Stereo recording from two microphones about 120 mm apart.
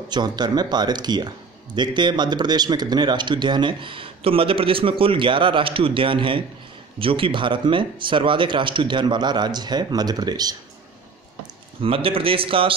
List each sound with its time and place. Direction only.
0.1 s speech: 35° right (ahead or behind)
11.8 s speech: 50° right (ahead or behind)